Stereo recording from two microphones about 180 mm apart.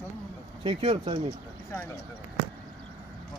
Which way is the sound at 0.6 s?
35° right (ahead or behind).